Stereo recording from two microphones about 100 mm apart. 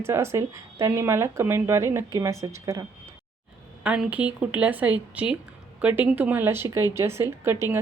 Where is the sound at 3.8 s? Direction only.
10° right (ahead or behind).